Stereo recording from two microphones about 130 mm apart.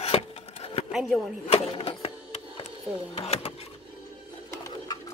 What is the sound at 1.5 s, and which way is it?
Printer, 45° left (ahead or behind).